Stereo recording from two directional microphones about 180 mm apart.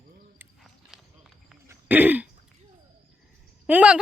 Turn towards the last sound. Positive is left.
turn(degrees=-5)  # may be behind; listen again after turning